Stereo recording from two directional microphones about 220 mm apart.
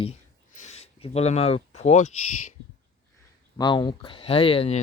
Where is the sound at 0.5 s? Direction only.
30° left (ahead or behind).